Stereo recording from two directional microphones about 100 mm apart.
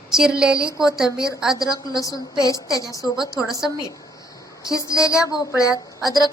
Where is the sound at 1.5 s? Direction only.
40° left (ahead or behind).